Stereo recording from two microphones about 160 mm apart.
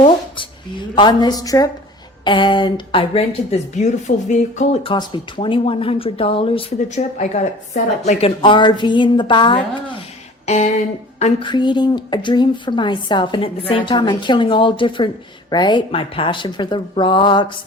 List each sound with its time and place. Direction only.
0.0 s speech: 30° left (ahead or behind); by 4.8 s 50° left (ahead or behind)
4.8 s speech: 30° left (ahead or behind)
8.4 s speech: 30° left (ahead or behind)
10.4 s a sound: 45° left (ahead or behind)
11.4 s speech: 30° left (ahead or behind)